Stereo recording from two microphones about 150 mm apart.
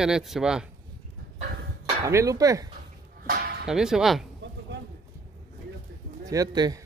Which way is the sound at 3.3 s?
85° right.